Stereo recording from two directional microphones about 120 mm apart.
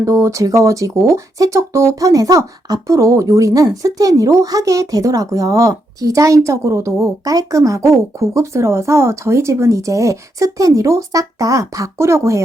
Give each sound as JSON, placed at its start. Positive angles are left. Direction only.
{"t": 0.0, "sound": "speech", "side_deg": -25}